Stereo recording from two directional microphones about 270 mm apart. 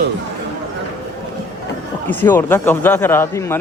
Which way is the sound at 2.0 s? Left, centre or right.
Centre.